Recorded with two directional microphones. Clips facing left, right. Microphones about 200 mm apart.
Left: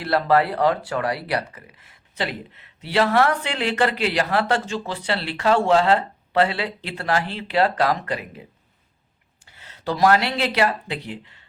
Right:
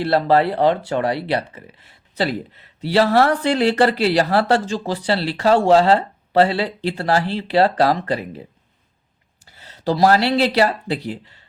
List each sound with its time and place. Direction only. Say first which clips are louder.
0.0 s speech: right 3 dB; 30° right (ahead or behind)